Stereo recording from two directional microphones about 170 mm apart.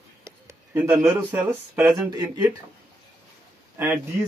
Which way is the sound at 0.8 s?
10° right (ahead or behind).